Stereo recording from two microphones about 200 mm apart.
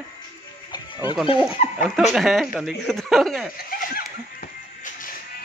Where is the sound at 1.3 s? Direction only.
35° left (ahead or behind).